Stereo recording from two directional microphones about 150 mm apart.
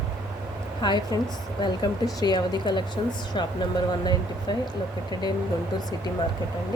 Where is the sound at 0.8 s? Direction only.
30° left (ahead or behind).